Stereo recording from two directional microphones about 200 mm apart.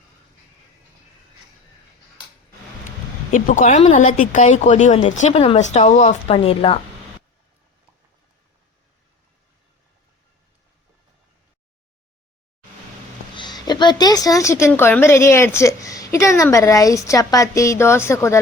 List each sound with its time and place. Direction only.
3.3 s speech: 40° left (ahead or behind)
13.3 s speech: 20° left (ahead or behind)